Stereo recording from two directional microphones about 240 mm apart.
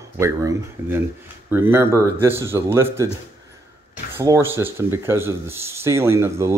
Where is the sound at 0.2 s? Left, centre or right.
Centre.